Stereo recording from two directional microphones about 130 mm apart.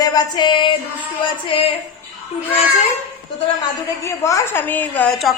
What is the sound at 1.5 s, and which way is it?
Speech, 40° left (ahead or behind).